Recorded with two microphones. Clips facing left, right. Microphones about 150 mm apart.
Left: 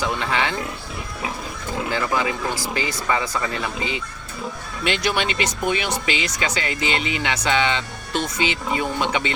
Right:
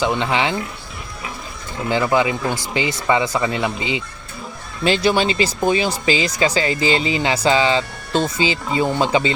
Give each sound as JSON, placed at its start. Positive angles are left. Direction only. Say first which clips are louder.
{"t": 0.0, "sound": "speech", "louder": "right 4 dB", "side_deg": -25}
{"t": 1.9, "sound": "speech", "louder": "right 7 dB", "side_deg": -25}
{"t": 4.8, "sound": "speech", "louder": "right 6 dB", "side_deg": -30}